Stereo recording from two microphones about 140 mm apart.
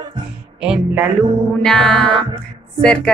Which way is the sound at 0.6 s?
5° right (ahead or behind).